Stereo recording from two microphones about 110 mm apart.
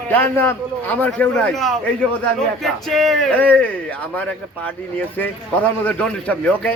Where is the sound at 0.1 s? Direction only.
20° left (ahead or behind).